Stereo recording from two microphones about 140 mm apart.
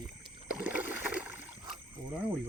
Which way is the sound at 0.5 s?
15° right (ahead or behind).